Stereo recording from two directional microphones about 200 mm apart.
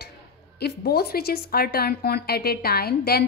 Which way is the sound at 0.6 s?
55° left (ahead or behind).